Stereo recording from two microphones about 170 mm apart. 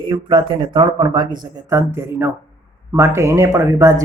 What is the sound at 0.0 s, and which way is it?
Speech, 25° right (ahead or behind).